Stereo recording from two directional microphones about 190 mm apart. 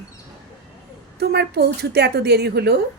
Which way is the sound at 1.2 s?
60° right (ahead or behind).